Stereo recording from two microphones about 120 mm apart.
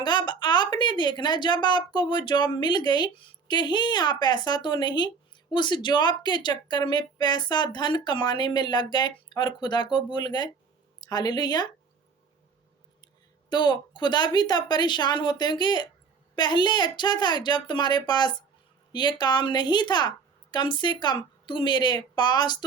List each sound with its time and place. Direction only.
0.0 s a woman's voice: 40° left (ahead or behind)
13.5 s a woman's voice: 35° left (ahead or behind)